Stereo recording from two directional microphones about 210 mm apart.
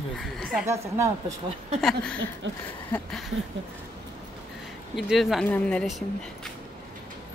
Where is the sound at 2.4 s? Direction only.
60° right (ahead or behind).